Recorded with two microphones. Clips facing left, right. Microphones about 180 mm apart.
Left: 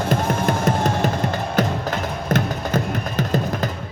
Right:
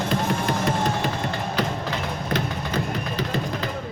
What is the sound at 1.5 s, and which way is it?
Music, 50° left (ahead or behind).